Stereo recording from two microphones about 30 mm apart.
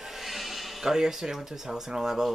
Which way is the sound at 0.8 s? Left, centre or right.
Centre.